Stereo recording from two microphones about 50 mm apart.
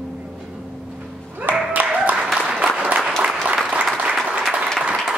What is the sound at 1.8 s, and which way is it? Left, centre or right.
Applause, right.